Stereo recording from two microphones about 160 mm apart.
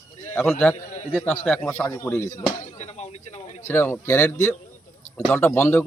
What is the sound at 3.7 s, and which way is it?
A man's voice, 10° left (ahead or behind).